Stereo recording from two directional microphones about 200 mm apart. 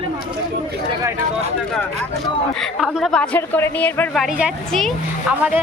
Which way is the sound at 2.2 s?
Centre (ahead or behind).